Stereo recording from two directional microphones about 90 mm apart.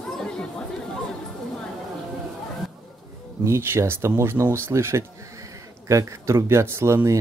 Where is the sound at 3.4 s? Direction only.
30° right (ahead or behind).